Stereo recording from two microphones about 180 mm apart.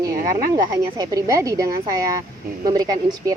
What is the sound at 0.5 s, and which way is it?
Speech, 20° right (ahead or behind).